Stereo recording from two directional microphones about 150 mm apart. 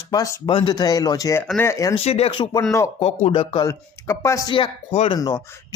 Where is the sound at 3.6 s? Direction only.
20° left (ahead or behind).